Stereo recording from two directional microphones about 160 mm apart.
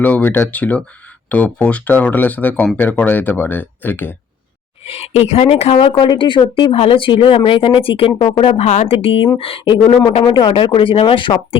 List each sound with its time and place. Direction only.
0.0 s speech: 10° left (ahead or behind)
4.9 s speech: 40° left (ahead or behind)